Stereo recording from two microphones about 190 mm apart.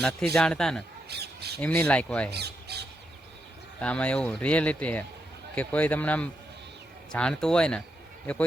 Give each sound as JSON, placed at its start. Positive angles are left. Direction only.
{"t": 0.3, "sound": "speech", "side_deg": 5}
{"t": 1.0, "sound": "squawk", "side_deg": -60}
{"t": 1.6, "sound": "speech", "side_deg": 10}
{"t": 2.3, "sound": "squawk", "side_deg": -60}
{"t": 3.8, "sound": "speech", "side_deg": 5}